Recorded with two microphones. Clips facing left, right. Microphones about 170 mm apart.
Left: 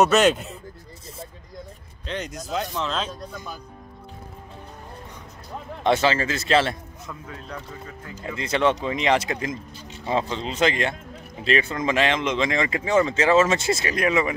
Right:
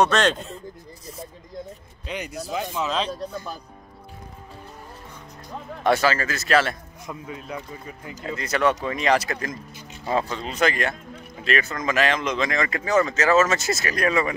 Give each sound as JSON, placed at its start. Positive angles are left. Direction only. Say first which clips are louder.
{"t": 0.0, "sound": "speech", "louder": "left 3 dB", "side_deg": 10}
{"t": 1.0, "sound": "snake", "louder": "right 1 dB", "side_deg": 30}
{"t": 2.0, "sound": "speech", "louder": "even", "side_deg": -10}
{"t": 5.9, "sound": "speech", "louder": "even", "side_deg": 25}
{"t": 7.1, "sound": "speech", "louder": "right 4 dB", "side_deg": -15}
{"t": 8.4, "sound": "speech", "louder": "left 1 dB", "side_deg": 25}